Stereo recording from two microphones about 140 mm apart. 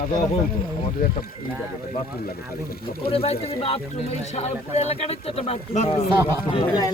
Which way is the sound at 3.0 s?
45° left (ahead or behind).